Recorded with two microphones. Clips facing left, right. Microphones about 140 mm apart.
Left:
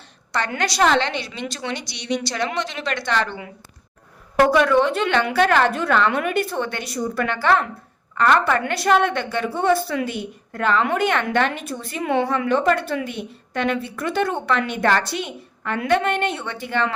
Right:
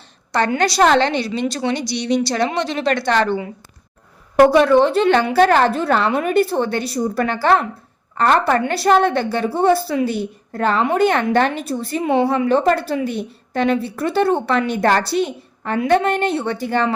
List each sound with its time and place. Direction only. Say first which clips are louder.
0.3 s a woman's voice: right 6 dB; 35° right (ahead or behind)